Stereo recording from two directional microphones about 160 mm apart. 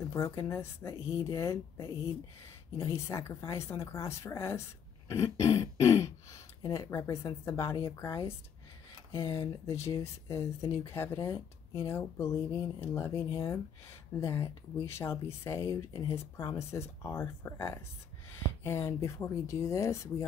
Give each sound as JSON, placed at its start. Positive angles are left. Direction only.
{"t": 0.1, "sound": "speech", "side_deg": 15}